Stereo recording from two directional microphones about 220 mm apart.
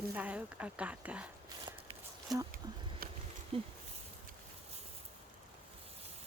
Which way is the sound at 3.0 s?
45° right (ahead or behind).